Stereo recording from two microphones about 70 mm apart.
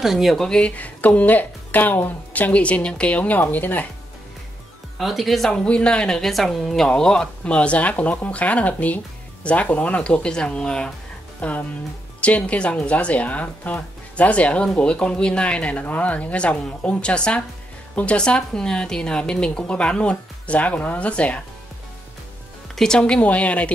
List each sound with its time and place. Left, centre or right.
0.0 s a woman's voice: centre
0.4 s speech: centre
4.9 s a woman's voice: centre
22.8 s speech: centre